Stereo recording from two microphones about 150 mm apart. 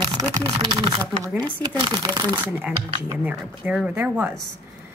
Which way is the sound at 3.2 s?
10° right (ahead or behind).